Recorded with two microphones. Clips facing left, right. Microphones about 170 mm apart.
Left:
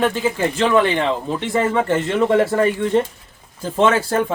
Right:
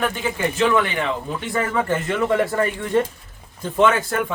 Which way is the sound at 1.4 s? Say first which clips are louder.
Left 4 dB; 25° left (ahead or behind).